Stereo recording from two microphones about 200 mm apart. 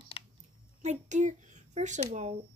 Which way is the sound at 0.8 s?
35° right (ahead or behind).